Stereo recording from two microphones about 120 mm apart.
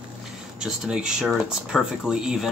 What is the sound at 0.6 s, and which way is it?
Speech, 5° right (ahead or behind).